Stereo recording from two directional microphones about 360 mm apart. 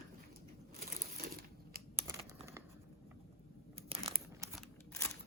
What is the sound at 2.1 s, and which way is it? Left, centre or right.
Computer keyboard, centre.